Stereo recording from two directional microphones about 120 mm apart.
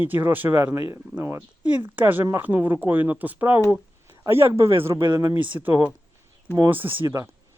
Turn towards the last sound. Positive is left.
turn(degrees=-15)  # may be behind; listen again after turning